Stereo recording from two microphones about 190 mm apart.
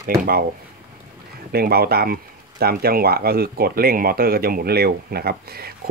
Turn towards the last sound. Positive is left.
turn(degrees=-55)  # may be behind; listen again after turning